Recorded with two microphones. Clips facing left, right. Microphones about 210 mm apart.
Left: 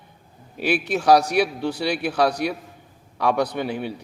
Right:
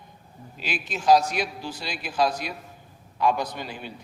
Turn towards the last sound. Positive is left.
turn(degrees=60)  # may be behind; listen again after turning